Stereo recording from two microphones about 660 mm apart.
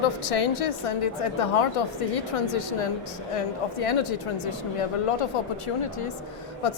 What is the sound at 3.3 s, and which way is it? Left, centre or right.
Speech, left.